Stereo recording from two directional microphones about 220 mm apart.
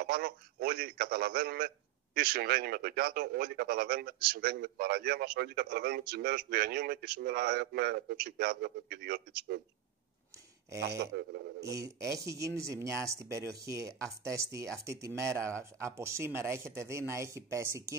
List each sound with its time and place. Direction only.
0.0 s a man's voice: 45° right (ahead or behind)
11.0 s a man's voice: 50° right (ahead or behind)
11.6 s speech: 15° right (ahead or behind)